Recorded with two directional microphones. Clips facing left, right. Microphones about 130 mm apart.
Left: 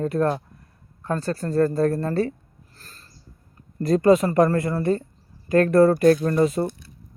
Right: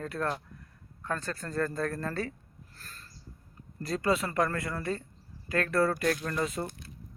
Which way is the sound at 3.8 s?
45° left (ahead or behind).